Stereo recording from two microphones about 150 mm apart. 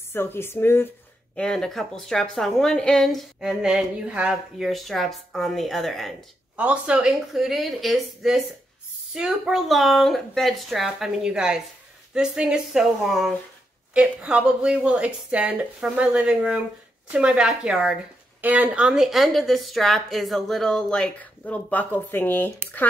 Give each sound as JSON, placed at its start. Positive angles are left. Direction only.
{"t": 0.1, "sound": "speech", "side_deg": 15}
{"t": 1.3, "sound": "a woman's voice", "side_deg": 5}